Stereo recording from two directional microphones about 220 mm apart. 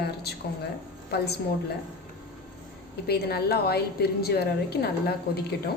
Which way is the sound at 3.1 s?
45° left (ahead or behind).